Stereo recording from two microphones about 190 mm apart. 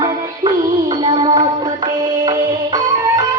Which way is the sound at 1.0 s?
25° right (ahead or behind).